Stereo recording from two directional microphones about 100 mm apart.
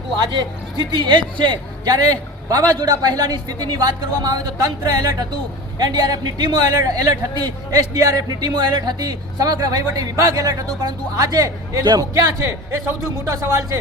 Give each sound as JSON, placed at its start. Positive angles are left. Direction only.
{"t": 0.2, "sound": "a man's voice", "side_deg": -45}